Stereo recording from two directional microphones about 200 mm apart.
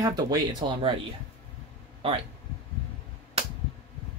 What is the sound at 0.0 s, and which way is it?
Speech, 20° right (ahead or behind).